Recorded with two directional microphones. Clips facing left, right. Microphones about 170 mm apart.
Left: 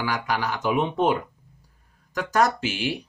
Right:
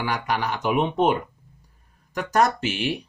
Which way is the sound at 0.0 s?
20° right (ahead or behind).